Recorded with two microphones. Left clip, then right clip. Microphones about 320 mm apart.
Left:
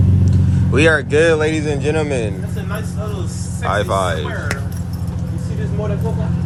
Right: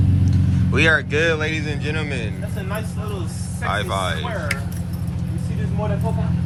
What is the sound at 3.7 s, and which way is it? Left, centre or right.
Speech, centre.